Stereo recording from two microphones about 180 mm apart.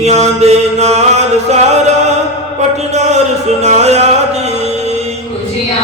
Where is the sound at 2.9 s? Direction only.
40° right (ahead or behind).